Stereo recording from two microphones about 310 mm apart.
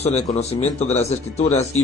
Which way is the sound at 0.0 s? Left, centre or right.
Left.